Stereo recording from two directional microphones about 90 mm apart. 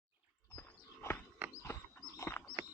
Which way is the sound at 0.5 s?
25° left (ahead or behind).